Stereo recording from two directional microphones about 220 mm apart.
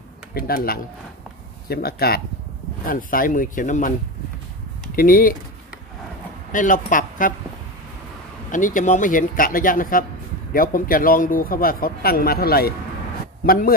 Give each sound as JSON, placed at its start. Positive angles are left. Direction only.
{"t": 0.3, "sound": "speech", "side_deg": 40}
{"t": 4.9, "sound": "speech", "side_deg": 40}
{"t": 6.5, "sound": "speech", "side_deg": 35}
{"t": 8.5, "sound": "speech", "side_deg": 35}